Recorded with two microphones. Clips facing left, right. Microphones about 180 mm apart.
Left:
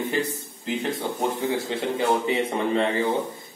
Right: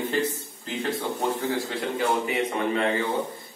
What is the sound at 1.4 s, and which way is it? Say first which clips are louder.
A man's voice: left 2 dB; 20° left (ahead or behind).